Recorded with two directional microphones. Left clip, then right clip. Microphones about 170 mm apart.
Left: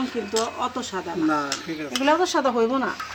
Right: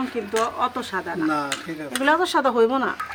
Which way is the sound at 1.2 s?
35° right (ahead or behind).